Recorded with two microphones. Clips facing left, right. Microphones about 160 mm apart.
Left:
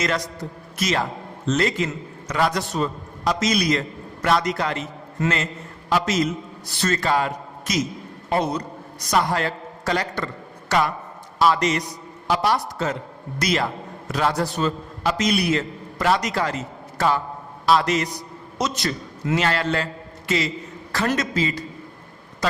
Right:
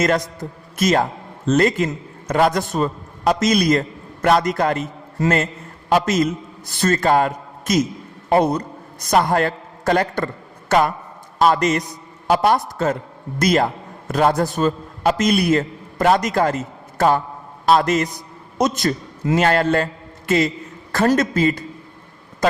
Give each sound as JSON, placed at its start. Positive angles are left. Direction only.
{"t": 0.0, "sound": "a man's voice", "side_deg": -50}
{"t": 5.9, "sound": "a man's voice", "side_deg": -50}